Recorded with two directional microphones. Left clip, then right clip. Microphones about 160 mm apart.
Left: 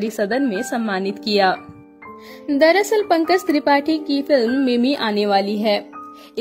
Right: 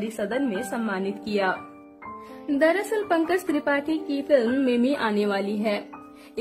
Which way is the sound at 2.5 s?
30° left (ahead or behind).